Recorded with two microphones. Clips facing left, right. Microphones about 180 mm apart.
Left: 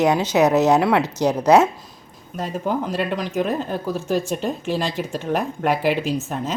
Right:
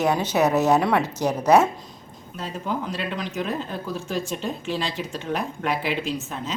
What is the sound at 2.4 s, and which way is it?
Speech, 50° left (ahead or behind).